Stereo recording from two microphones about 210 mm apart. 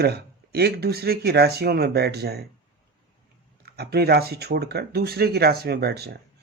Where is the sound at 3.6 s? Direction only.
50° right (ahead or behind).